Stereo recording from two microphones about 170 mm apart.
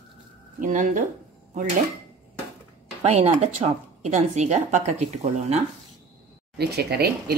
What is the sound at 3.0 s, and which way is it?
A woman's voice, 40° right (ahead or behind).